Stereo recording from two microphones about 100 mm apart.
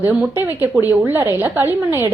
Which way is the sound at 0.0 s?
20° right (ahead or behind).